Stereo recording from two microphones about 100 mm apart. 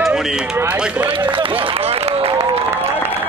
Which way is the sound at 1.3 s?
60° right (ahead or behind).